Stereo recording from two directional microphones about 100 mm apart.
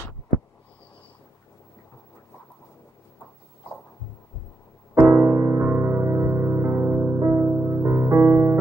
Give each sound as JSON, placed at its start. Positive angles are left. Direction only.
{"t": 4.9, "sound": "music", "side_deg": -20}